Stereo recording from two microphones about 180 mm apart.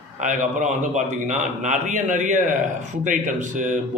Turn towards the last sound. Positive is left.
turn(degrees=-45)  # may be behind; listen again after turning